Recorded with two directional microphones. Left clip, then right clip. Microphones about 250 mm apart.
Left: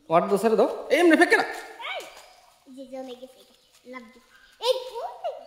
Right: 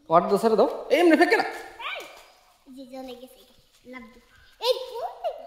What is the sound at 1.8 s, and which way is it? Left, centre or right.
Dog, right.